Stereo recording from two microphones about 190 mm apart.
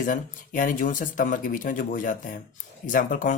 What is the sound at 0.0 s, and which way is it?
Speech, 45° left (ahead or behind).